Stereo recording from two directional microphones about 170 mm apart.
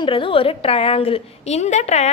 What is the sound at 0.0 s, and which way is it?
A woman's voice, 30° left (ahead or behind).